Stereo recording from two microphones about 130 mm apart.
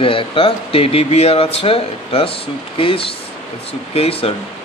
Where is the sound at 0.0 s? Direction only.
45° left (ahead or behind).